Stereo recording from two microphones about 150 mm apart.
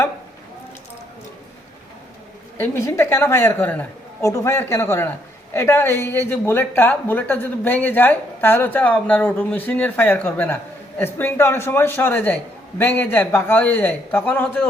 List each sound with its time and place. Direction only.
2.6 s a woman's voice: 20° left (ahead or behind)